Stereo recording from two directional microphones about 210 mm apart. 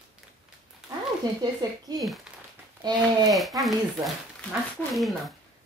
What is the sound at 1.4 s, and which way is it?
Speech, 20° right (ahead or behind).